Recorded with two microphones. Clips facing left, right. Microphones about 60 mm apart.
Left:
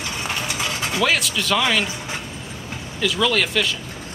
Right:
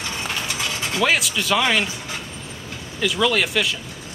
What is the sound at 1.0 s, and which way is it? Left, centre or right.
Speech, centre.